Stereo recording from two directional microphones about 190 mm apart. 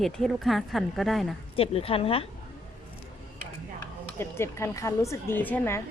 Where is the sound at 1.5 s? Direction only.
30° left (ahead or behind).